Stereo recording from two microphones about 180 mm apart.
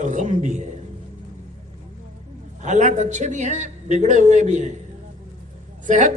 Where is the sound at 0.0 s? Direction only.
40° right (ahead or behind).